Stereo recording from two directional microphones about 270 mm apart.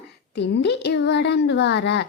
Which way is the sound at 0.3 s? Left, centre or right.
Left.